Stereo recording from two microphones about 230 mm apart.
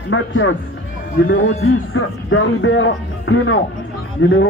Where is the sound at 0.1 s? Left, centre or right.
Left.